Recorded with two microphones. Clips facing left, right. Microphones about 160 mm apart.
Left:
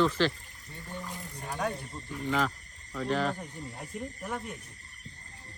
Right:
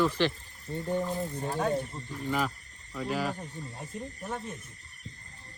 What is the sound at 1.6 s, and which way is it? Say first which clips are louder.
Speech: right 4 dB; centre (ahead or behind).